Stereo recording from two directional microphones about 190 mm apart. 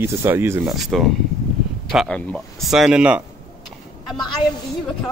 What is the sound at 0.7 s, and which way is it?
Speech, centre (ahead or behind).